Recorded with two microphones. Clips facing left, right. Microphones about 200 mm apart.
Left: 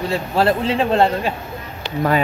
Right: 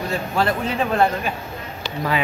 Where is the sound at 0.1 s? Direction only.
30° left (ahead or behind).